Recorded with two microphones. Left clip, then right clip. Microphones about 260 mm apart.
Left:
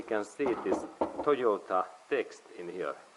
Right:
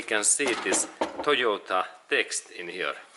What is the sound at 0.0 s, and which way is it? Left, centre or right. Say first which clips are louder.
Speech: right 6 dB; centre.